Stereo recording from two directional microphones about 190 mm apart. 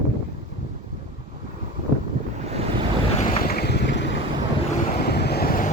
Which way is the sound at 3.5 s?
60° left (ahead or behind).